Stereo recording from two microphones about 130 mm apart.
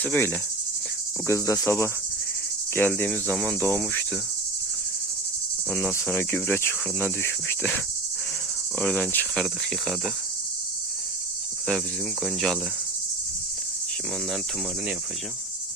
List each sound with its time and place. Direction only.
0.0 s speech: 15° left (ahead or behind)
1.3 s cricket: 25° left (ahead or behind)
2.7 s speech: 15° left (ahead or behind)
5.7 s speech: 10° left (ahead or behind)
8.8 s cricket: 5° left (ahead or behind)
12.2 s cricket: centre (ahead or behind)